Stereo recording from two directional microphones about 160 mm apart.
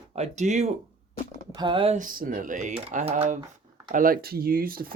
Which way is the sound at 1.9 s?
60° right (ahead or behind).